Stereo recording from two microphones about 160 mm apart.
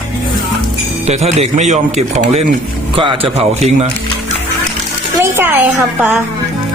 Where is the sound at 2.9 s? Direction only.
35° right (ahead or behind).